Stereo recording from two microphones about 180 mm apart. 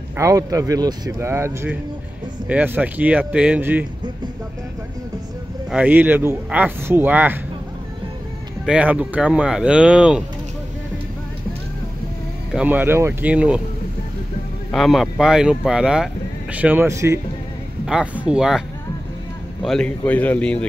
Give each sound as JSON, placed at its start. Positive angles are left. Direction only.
{"t": 0.2, "sound": "speech", "side_deg": -20}
{"t": 5.7, "sound": "speech", "side_deg": -5}
{"t": 8.6, "sound": "speech", "side_deg": -5}
{"t": 12.5, "sound": "speech", "side_deg": -10}
{"t": 14.7, "sound": "speech", "side_deg": 0}
{"t": 17.8, "sound": "speech", "side_deg": -5}
{"t": 19.6, "sound": "a man's voice", "side_deg": 5}